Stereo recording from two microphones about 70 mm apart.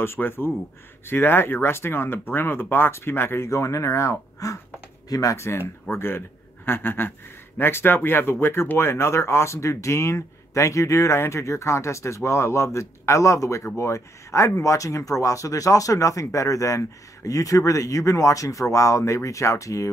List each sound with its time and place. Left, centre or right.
0.0 s a man's voice: left